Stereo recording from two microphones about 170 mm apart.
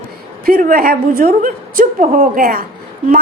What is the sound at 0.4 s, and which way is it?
A woman's voice, 60° right (ahead or behind).